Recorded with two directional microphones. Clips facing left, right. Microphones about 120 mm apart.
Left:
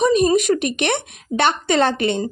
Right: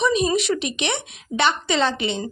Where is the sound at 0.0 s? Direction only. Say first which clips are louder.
Left 5 dB; 50° left (ahead or behind).